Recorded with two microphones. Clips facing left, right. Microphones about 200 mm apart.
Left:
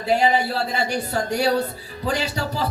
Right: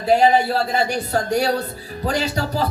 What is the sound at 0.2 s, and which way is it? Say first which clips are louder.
Speech: right 4 dB; 40° right (ahead or behind).